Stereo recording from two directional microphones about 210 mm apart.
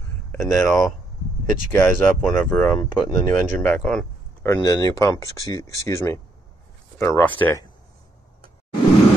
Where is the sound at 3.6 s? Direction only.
5° left (ahead or behind).